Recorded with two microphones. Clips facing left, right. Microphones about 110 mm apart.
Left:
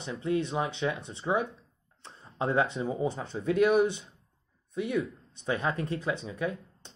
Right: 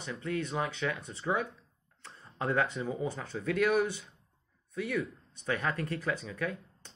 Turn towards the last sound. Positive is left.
turn(degrees=20)  # may be behind; listen again after turning